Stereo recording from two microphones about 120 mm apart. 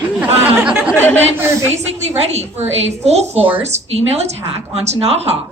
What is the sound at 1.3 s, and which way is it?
Speech, 20° right (ahead or behind).